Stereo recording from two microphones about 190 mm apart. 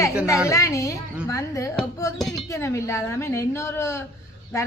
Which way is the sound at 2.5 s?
15° left (ahead or behind).